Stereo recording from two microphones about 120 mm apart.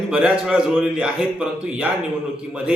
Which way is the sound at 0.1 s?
5° right (ahead or behind).